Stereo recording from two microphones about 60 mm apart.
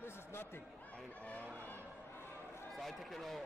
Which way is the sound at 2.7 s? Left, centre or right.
Centre.